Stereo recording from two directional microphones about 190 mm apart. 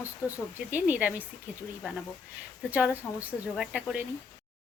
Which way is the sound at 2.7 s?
10° right (ahead or behind).